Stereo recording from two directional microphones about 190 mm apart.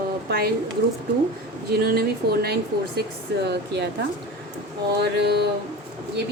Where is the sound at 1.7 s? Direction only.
55° right (ahead or behind).